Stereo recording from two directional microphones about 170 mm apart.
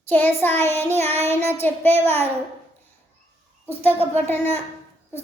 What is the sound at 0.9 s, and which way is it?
Child singing, 40° right (ahead or behind).